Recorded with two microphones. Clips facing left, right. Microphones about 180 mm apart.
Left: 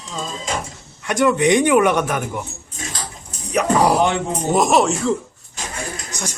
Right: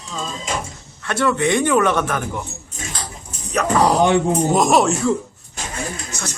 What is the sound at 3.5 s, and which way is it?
Speech, 10° left (ahead or behind).